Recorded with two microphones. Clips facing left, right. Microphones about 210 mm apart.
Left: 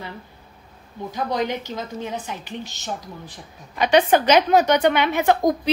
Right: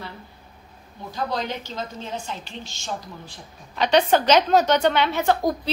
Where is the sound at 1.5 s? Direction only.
15° left (ahead or behind).